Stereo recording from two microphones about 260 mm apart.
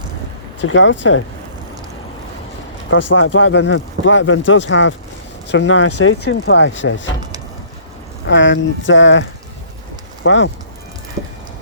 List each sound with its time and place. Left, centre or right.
0.6 s speech: left
3.1 s speech: left
8.3 s speech: left
10.2 s speech: left